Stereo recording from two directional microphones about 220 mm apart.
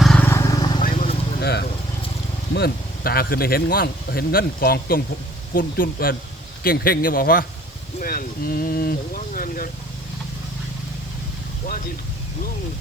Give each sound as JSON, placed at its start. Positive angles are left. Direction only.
{"t": 0.0, "sound": "vehicle", "side_deg": 5}
{"t": 1.4, "sound": "vehicle", "side_deg": 45}
{"t": 2.5, "sound": "speech", "side_deg": 45}